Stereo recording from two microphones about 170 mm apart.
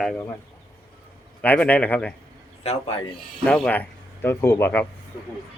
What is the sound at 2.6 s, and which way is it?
Speech, 35° left (ahead or behind).